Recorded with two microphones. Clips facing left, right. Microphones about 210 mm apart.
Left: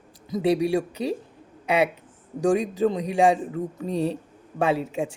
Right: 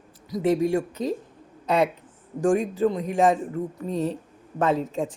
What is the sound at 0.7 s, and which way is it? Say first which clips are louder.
Speech: even; 10° left (ahead or behind).